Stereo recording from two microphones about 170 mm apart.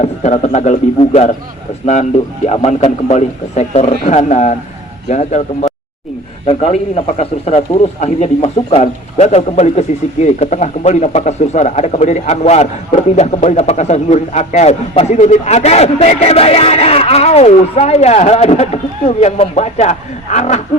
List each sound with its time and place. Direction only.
0.0 s a man's voice: 45° left (ahead or behind)
2.5 s a man's voice: 40° left (ahead or behind)